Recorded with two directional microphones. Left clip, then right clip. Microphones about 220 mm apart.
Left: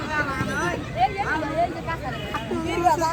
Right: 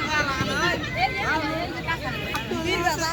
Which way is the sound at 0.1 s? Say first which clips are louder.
Left 1 dB; 40° right (ahead or behind).